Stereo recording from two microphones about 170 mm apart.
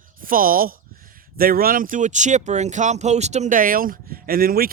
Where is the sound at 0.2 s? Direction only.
55° right (ahead or behind).